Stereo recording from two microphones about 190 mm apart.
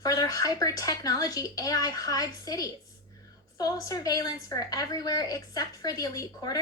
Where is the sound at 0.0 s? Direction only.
20° left (ahead or behind).